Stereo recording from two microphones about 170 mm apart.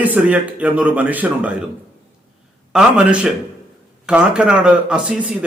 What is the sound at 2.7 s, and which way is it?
A man's voice, 5° right (ahead or behind).